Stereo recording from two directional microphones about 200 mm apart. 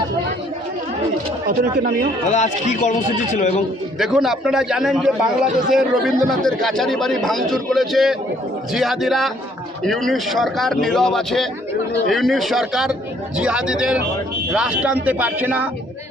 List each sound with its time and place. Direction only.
1.5 s speech: 45° right (ahead or behind)
2.3 s a man's voice: 35° left (ahead or behind)
3.9 s a man's voice: centre (ahead or behind)